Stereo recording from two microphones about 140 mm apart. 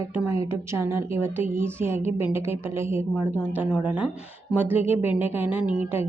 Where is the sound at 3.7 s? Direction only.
5° right (ahead or behind).